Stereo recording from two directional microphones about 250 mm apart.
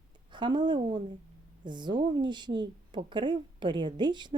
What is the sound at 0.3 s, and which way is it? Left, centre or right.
Speech, centre.